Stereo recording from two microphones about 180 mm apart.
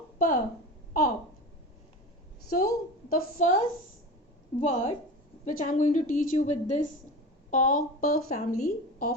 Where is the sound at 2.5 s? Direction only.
55° left (ahead or behind).